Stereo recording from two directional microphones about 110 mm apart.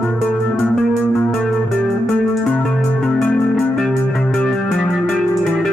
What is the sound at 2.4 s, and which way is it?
Music, 10° left (ahead or behind).